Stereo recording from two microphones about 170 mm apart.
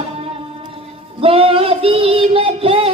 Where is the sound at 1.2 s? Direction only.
35° right (ahead or behind).